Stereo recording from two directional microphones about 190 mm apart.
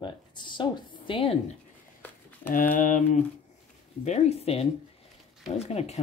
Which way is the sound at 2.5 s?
45° left (ahead or behind).